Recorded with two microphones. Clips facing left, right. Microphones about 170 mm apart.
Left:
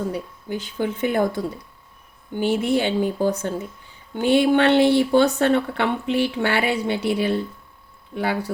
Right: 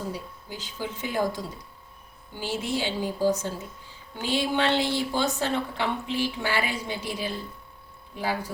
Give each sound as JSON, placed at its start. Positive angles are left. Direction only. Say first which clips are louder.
{"t": 0.1, "sound": "speech", "louder": "left 8 dB", "side_deg": 60}